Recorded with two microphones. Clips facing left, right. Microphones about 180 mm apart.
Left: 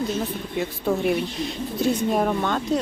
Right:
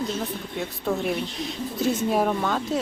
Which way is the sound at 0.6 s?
5° left (ahead or behind).